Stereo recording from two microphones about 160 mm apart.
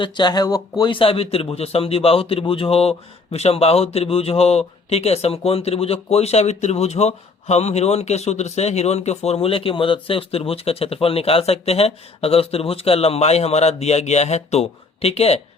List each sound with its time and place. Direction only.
0.0 s a man's voice: 25° left (ahead or behind)